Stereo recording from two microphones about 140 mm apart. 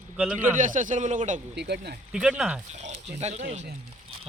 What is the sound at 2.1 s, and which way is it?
Speech, 5° right (ahead or behind).